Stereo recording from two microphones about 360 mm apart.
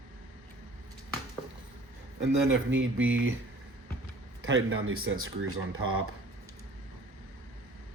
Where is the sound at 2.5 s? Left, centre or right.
Right.